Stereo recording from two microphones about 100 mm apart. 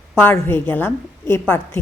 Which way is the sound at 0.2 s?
20° left (ahead or behind).